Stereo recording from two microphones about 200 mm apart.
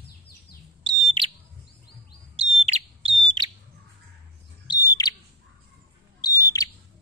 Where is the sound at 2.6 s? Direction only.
30° right (ahead or behind).